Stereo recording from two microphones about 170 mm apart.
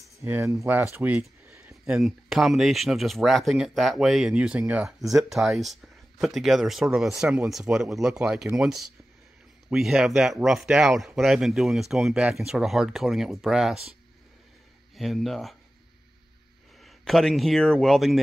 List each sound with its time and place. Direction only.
0.2 s speech: 15° right (ahead or behind)
0.9 s a sound: 10° right (ahead or behind)
1.9 s speech: centre (ahead or behind)
15.0 s speech: centre (ahead or behind)
16.8 s a man's voice: centre (ahead or behind)